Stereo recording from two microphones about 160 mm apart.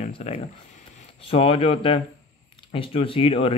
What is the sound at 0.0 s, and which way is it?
Speech, 40° left (ahead or behind).